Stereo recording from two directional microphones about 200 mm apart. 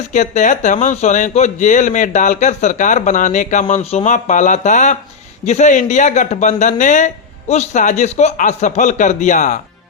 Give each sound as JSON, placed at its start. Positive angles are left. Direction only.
{"t": 0.1, "sound": "speech", "side_deg": 35}